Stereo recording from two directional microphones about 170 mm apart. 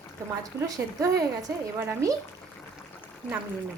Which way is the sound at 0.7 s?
20° right (ahead or behind).